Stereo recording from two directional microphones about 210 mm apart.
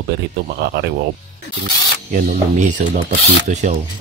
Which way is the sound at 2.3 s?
35° right (ahead or behind).